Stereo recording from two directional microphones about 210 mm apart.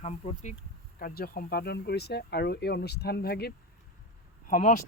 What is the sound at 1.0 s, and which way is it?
Speech, 45° left (ahead or behind).